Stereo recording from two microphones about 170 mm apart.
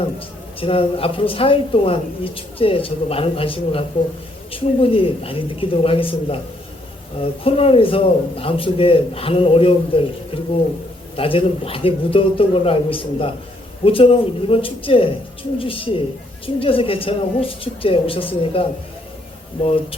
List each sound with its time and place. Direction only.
0.6 s a woman's voice: 35° left (ahead or behind)
19.6 s a woman's voice: 35° left (ahead or behind)